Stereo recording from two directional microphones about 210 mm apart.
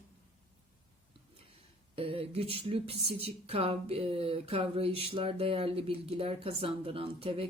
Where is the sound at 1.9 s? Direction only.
25° right (ahead or behind).